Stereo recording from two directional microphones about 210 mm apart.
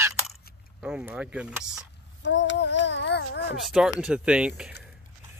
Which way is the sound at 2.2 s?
60° left (ahead or behind).